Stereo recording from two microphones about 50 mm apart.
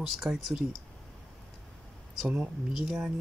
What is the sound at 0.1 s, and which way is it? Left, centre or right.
Speech, centre.